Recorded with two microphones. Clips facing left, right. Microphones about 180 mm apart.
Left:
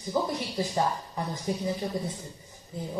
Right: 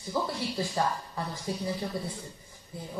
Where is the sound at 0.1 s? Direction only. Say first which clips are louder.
Left 2 dB; 20° left (ahead or behind).